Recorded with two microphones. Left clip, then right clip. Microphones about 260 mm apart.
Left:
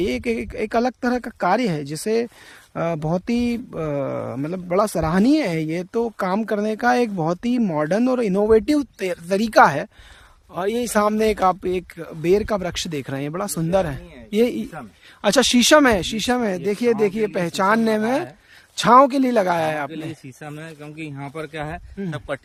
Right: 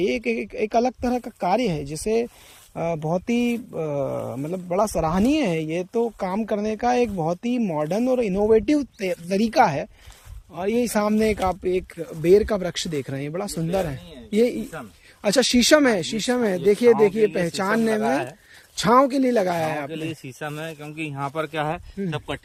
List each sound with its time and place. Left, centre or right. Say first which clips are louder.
0.0 s speech: even; centre
12.2 s speech: right 2 dB; centre
19.9 s speech: right 1 dB; centre
22.0 s speech: left 2 dB; centre